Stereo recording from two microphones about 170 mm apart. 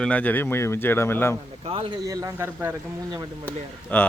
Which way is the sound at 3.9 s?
10° left (ahead or behind).